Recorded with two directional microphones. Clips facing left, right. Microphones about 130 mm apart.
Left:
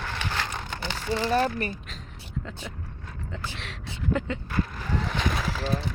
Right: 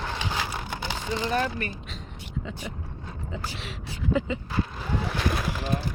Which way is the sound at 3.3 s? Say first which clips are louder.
Right 1 dB; 5° right (ahead or behind).